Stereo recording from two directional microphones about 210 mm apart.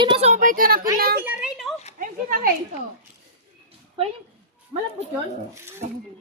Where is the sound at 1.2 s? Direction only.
5° right (ahead or behind).